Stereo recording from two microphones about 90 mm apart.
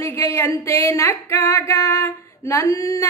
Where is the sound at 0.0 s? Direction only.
30° left (ahead or behind).